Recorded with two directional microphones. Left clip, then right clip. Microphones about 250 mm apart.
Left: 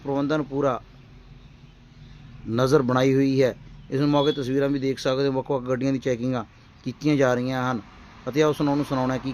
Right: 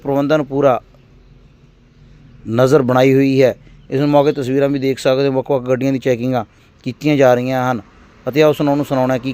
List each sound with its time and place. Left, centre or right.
0.0 s a man's voice: centre
2.5 s a man's voice: centre